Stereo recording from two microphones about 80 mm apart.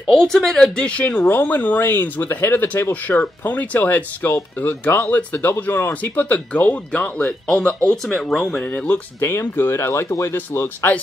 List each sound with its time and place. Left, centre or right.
0.1 s speech: centre; by 10.9 s left